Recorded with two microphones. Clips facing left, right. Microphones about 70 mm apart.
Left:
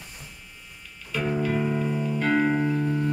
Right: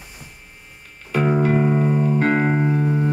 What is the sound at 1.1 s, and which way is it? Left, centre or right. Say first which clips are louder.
Music: right 7 dB; right.